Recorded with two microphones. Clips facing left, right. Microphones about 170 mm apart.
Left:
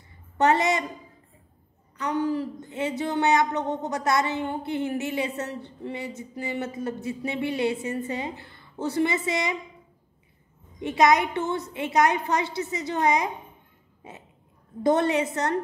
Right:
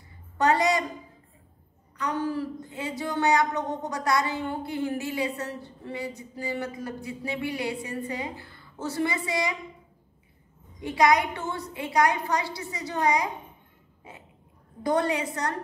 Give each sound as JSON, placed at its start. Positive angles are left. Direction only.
{"t": 0.4, "sound": "a woman's voice", "side_deg": 25}
{"t": 2.0, "sound": "speech", "side_deg": 15}
{"t": 10.8, "sound": "speech", "side_deg": 20}
{"t": 14.8, "sound": "speech", "side_deg": 25}